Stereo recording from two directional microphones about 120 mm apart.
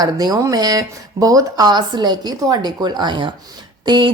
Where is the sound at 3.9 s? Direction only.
45° right (ahead or behind).